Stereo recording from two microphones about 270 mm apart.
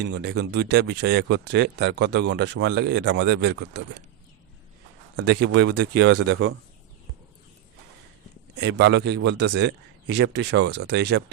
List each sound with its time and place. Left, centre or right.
0.0 s speech: right
5.1 s speech: right
8.5 s speech: right